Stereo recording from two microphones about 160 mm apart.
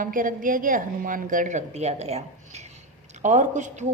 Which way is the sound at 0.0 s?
60° right (ahead or behind).